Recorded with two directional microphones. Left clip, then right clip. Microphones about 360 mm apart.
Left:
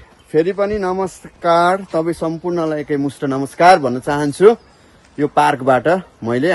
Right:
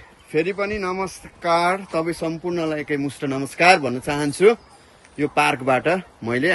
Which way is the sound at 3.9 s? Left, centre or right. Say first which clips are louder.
Left 5 dB; centre.